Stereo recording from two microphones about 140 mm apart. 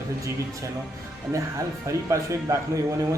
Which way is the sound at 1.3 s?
20° right (ahead or behind).